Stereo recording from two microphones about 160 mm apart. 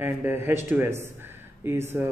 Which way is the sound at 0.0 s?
15° right (ahead or behind).